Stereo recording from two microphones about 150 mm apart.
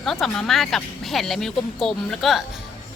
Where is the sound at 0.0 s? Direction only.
Centre (ahead or behind).